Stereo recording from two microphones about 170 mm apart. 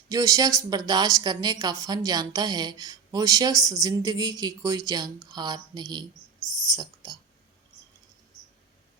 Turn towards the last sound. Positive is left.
turn(degrees=-20)  # may be behind; listen again after turning